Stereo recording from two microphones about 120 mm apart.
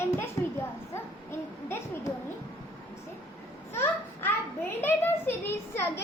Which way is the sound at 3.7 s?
20° left (ahead or behind).